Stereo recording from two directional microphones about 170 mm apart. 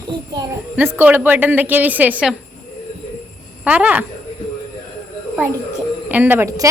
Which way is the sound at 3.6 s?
10° right (ahead or behind).